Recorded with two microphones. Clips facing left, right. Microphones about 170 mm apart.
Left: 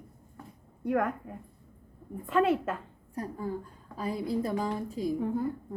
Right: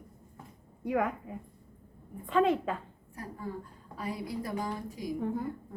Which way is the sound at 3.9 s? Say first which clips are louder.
Left 5 dB; 25° left (ahead or behind).